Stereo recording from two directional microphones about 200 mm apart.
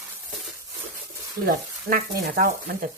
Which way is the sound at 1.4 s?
45° right (ahead or behind).